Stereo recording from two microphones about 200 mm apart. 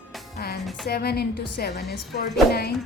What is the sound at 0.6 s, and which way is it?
Speech, centre (ahead or behind).